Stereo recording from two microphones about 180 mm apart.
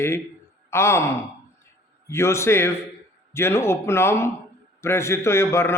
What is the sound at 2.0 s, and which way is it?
A man's voice, 15° left (ahead or behind).